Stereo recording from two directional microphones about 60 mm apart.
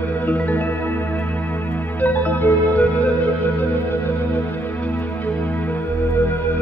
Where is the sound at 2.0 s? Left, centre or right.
Left.